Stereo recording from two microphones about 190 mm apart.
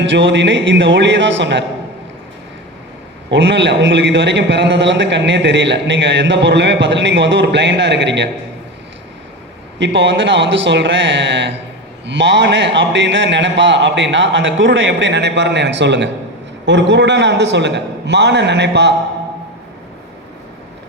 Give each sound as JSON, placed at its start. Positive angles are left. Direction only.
{"t": 0.0, "sound": "a man's voice", "side_deg": -70}
{"t": 3.2, "sound": "a man's voice", "side_deg": -70}
{"t": 9.7, "sound": "a man's voice", "side_deg": -70}